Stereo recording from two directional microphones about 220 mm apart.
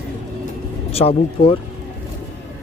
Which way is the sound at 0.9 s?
25° left (ahead or behind).